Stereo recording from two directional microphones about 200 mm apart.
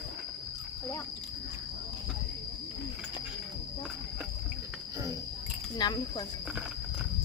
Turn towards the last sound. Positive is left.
turn(degrees=20)  # may be behind; listen again after turning